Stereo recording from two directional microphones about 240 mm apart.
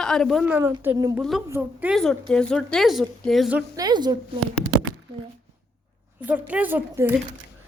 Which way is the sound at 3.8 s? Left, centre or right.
Centre.